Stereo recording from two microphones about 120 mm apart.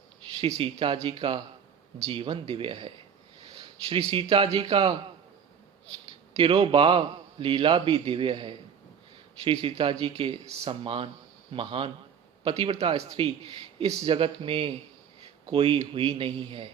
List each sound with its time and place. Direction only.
0.4 s a man's voice: 50° right (ahead or behind)
3.6 s a sound: 45° right (ahead or behind)
4.1 s a man's voice: 45° right (ahead or behind)
6.4 s a man's voice: 45° right (ahead or behind)